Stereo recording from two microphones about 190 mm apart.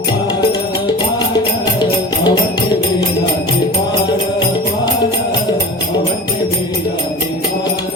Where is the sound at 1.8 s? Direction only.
20° left (ahead or behind).